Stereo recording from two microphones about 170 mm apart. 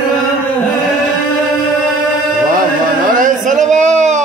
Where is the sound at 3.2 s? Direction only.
50° right (ahead or behind).